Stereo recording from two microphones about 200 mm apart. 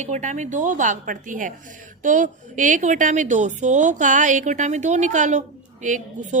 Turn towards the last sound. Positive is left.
turn(degrees=-40)  # may be behind; listen again after turning